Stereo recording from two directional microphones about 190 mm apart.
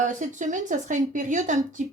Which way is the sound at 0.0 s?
40° right (ahead or behind).